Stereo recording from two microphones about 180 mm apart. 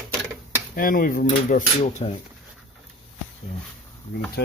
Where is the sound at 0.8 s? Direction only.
50° left (ahead or behind).